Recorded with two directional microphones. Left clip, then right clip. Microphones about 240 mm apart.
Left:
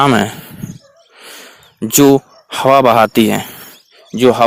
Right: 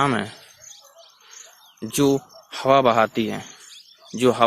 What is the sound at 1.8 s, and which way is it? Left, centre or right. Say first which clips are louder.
Speech: left 11 dB; left.